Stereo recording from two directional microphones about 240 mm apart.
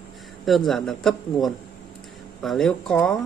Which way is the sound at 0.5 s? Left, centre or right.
Centre.